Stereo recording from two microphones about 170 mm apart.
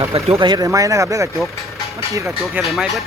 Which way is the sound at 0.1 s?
30° right (ahead or behind).